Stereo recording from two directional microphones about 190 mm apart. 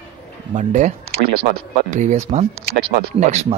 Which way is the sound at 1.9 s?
40° right (ahead or behind).